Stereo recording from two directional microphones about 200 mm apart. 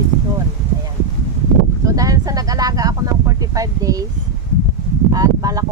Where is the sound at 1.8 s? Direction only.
15° right (ahead or behind).